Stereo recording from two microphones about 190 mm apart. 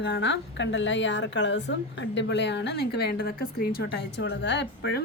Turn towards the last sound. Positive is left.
turn(degrees=60)  # may be behind; listen again after turning